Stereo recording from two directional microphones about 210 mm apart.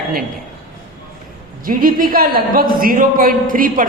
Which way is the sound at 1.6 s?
40° right (ahead or behind).